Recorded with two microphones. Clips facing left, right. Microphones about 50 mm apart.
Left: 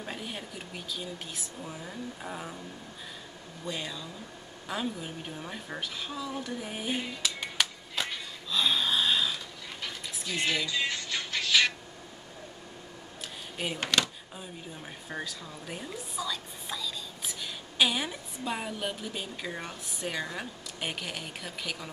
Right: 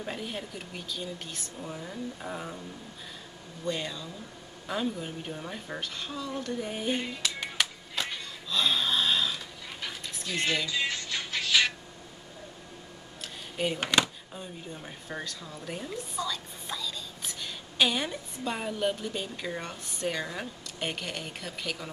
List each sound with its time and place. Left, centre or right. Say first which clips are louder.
0.0 s a woman's voice: right 2 dB; centre
3.6 s a woman's voice: right 3 dB; centre
4.6 s a sound: right 2 dB; centre
13.2 s a sound: right 4 dB; centre
13.7 s speech: right 1 dB; centre
15.0 s a woman's voice: even; centre